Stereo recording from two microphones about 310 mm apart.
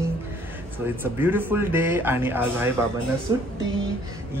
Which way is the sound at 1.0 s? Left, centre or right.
Centre.